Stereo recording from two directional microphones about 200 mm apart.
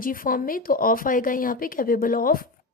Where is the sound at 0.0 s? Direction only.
45° left (ahead or behind).